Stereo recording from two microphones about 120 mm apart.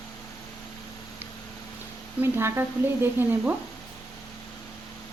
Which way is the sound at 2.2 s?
20° right (ahead or behind).